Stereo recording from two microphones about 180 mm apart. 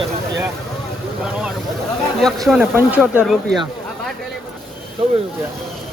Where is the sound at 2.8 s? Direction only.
10° right (ahead or behind).